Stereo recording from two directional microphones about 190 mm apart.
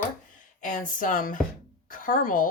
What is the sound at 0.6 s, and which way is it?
A woman's voice, 45° left (ahead or behind).